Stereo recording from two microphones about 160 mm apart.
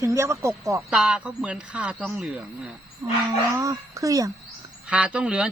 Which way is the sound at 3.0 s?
15° right (ahead or behind).